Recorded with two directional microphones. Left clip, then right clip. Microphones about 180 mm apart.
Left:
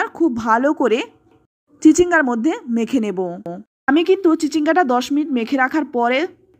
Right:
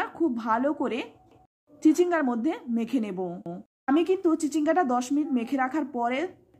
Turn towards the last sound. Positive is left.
turn(degrees=30)  # may be behind; listen again after turning